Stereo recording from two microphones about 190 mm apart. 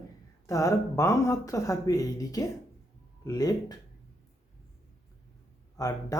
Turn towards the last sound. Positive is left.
turn(degrees=15)  # may be behind; listen again after turning